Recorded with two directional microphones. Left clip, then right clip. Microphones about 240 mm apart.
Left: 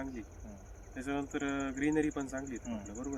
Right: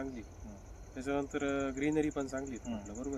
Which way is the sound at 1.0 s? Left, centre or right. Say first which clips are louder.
Right 2 dB; right.